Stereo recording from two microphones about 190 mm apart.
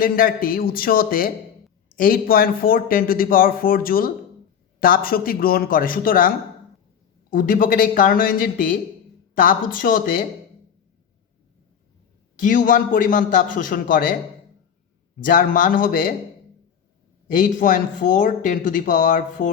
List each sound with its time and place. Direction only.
0.0 s speech: 50° left (ahead or behind)
12.4 s speech: 45° left (ahead or behind)
15.2 s speech: 45° left (ahead or behind)
17.3 s speech: 45° left (ahead or behind)